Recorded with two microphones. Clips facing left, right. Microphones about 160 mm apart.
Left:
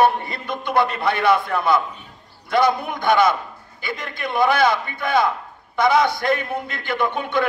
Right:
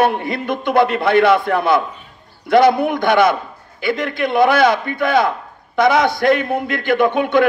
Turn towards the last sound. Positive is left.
turn(degrees=-60)  # may be behind; listen again after turning